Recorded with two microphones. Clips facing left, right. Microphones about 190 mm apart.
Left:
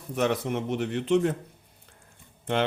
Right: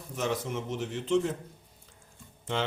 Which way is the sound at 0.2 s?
65° left (ahead or behind).